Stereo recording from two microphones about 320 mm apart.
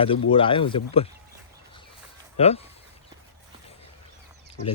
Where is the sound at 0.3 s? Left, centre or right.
Centre.